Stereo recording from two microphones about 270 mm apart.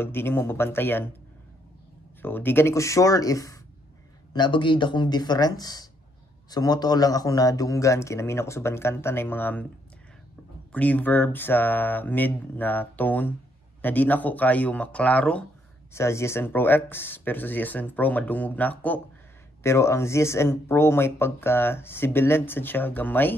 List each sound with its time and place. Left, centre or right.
0.0 s speech: centre
2.2 s speech: centre
10.7 s speech: centre